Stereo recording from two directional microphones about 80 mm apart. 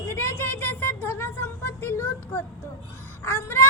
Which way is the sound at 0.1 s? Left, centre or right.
Left.